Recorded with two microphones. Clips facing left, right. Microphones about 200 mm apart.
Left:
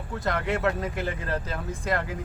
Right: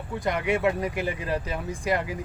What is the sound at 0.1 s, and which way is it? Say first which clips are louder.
Speech: right 2 dB; 15° right (ahead or behind).